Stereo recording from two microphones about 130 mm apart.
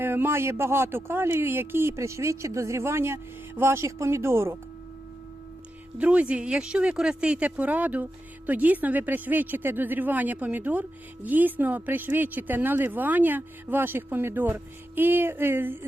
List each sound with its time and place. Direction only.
0.0 s speech: 15° right (ahead or behind)
6.0 s a woman's voice: 10° right (ahead or behind)